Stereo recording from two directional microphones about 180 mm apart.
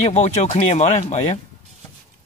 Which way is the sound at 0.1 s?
35° left (ahead or behind).